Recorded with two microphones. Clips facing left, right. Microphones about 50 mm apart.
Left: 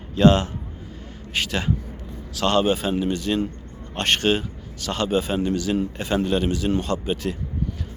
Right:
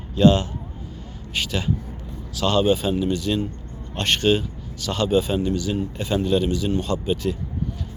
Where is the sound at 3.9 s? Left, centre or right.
Left.